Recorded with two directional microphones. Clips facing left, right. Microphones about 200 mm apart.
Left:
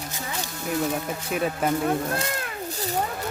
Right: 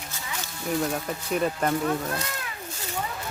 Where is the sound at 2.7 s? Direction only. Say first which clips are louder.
Left 8 dB; 35° left (ahead or behind).